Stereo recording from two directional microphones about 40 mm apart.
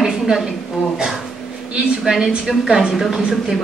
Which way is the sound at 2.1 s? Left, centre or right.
Centre.